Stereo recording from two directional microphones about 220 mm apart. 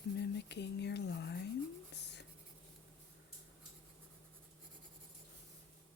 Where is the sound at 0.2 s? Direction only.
50° left (ahead or behind).